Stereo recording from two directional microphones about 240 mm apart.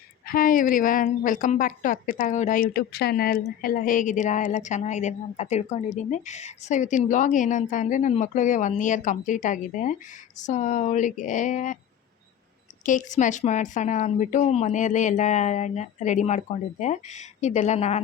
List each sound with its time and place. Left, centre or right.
0.3 s a woman's voice: left
12.8 s a woman's voice: left